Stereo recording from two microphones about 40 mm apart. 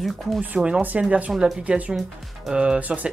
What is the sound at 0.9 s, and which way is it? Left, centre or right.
Speech, right.